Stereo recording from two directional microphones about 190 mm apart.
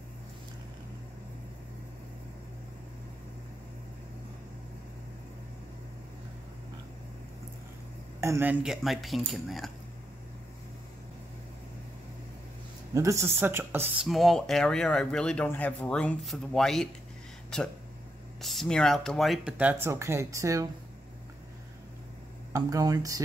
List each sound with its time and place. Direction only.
8.2 s speech: 10° right (ahead or behind)
12.9 s speech: 15° right (ahead or behind)
14.0 s speech: centre (ahead or behind); by 20.6 s 15° right (ahead or behind)
22.5 s speech: 20° right (ahead or behind)